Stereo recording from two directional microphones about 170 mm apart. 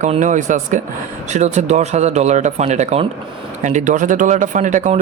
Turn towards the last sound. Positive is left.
turn(degrees=-45)  # may be behind; listen again after turning